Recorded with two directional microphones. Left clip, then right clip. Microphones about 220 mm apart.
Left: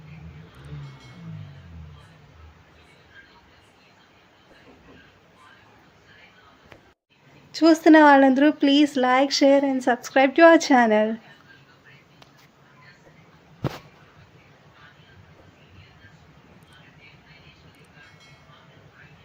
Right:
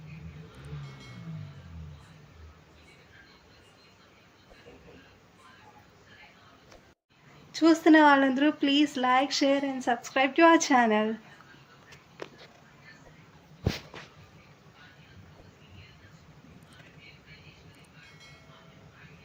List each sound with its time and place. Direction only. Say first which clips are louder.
0.9 s music: left 1 dB; centre (ahead or behind)
7.6 s speech: left 6 dB; 35° left (ahead or behind)
18.0 s train: left 1 dB; centre (ahead or behind)